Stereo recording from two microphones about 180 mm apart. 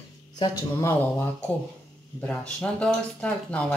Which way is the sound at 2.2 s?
5° left (ahead or behind).